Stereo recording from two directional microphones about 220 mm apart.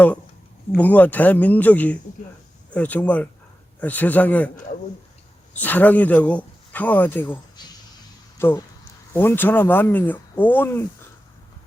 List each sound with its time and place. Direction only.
0.7 s speech: 5° left (ahead or behind)
5.5 s speech: 10° left (ahead or behind)
7.6 s a sound: 20° left (ahead or behind)
8.4 s speech: 10° left (ahead or behind)